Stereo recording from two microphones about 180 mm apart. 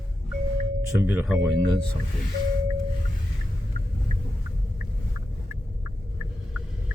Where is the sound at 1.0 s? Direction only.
10° right (ahead or behind).